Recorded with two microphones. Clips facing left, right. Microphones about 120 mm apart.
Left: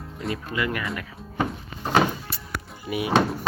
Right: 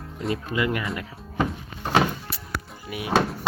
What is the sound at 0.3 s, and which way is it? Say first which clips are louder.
Speech: right 2 dB; 25° right (ahead or behind).